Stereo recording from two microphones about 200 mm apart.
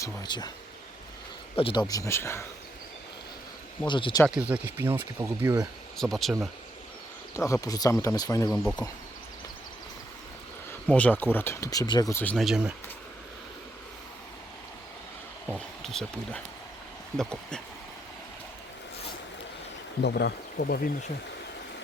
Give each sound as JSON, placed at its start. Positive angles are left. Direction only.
{"t": 0.0, "sound": "speech", "side_deg": 20}
{"t": 1.5, "sound": "speech", "side_deg": 25}
{"t": 1.8, "sound": "speech", "side_deg": 15}
{"t": 3.8, "sound": "speech", "side_deg": 25}
{"t": 4.3, "sound": "speech", "side_deg": -5}
{"t": 6.0, "sound": "speech", "side_deg": 0}
{"t": 7.3, "sound": "speech", "side_deg": 15}
{"t": 8.6, "sound": "speech", "side_deg": 5}
{"t": 10.7, "sound": "speech", "side_deg": 5}
{"t": 15.5, "sound": "speech", "side_deg": 0}
{"t": 20.0, "sound": "speech", "side_deg": 55}